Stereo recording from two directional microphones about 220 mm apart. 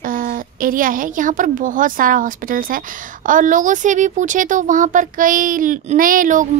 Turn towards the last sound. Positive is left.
turn(degrees=-35)  # may be behind; listen again after turning